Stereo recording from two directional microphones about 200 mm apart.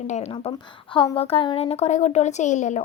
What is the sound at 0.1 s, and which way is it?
A woman's voice, 30° left (ahead or behind).